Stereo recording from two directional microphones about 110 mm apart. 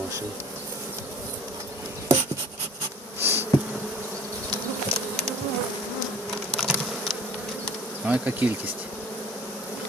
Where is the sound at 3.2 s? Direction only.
20° right (ahead or behind).